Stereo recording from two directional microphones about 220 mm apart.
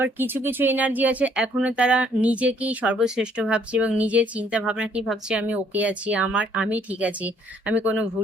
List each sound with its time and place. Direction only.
0.0 s speech: 10° right (ahead or behind)